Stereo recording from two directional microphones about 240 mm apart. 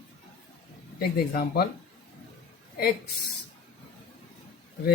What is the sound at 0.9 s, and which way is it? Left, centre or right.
Speech, left.